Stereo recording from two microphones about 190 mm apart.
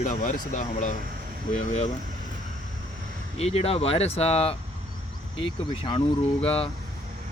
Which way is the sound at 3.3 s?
35° left (ahead or behind).